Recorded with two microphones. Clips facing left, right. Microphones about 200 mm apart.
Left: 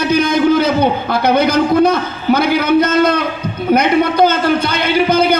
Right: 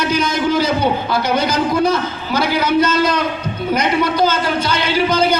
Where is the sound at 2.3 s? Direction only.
55° left (ahead or behind).